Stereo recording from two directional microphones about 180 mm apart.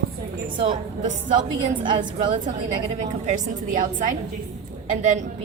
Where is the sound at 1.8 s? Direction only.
25° right (ahead or behind).